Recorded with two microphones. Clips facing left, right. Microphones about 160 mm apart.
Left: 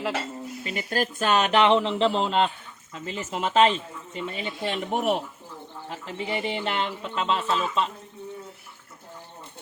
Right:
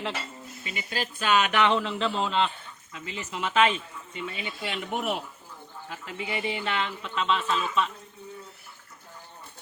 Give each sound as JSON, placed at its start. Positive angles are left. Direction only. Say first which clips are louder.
{"t": 0.6, "sound": "speech", "louder": "left 6 dB", "side_deg": 45}
{"t": 1.5, "sound": "speech", "louder": "left 5 dB", "side_deg": 25}